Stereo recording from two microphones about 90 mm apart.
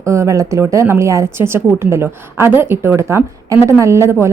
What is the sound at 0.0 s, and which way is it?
A woman's voice, 35° right (ahead or behind).